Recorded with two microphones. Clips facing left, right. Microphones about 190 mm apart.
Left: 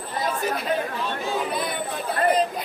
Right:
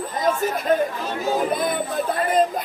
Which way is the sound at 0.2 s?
45° right (ahead or behind).